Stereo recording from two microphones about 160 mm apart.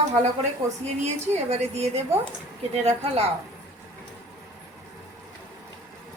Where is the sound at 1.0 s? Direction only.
40° right (ahead or behind).